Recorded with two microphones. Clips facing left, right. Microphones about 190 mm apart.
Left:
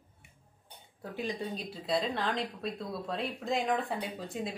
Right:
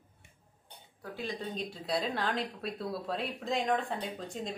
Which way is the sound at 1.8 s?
Centre (ahead or behind).